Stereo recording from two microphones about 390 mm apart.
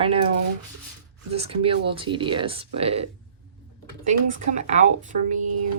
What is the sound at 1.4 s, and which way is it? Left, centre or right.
A woman's voice, centre.